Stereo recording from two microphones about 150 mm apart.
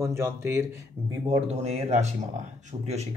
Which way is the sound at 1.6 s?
45° right (ahead or behind).